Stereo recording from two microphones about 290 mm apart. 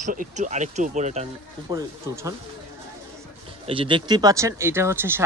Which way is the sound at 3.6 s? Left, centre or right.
Centre.